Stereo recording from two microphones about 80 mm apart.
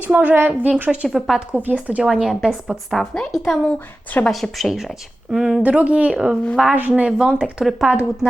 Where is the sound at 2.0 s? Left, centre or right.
Centre.